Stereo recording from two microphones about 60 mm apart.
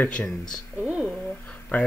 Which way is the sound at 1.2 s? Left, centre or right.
Centre.